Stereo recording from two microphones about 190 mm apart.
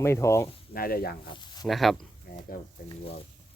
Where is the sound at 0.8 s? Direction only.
50° left (ahead or behind).